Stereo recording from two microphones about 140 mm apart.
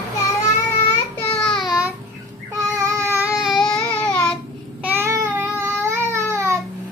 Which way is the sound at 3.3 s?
Centre (ahead or behind).